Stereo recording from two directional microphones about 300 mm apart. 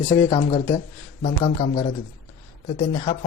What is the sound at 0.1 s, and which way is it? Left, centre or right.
Speech, centre.